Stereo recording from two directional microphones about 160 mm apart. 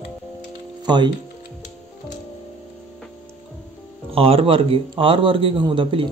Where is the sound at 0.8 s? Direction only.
30° right (ahead or behind).